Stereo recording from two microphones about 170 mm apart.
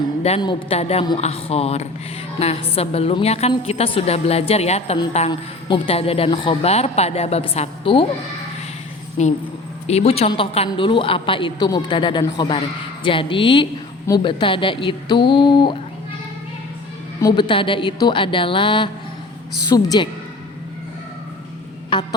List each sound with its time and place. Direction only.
0.2 s a woman's voice: 40° left (ahead or behind)
5.3 s a man's voice: 30° left (ahead or behind)
9.2 s a man's voice: 40° left (ahead or behind)
17.2 s a man's voice: 25° left (ahead or behind)
21.9 s a man's voice: 30° left (ahead or behind)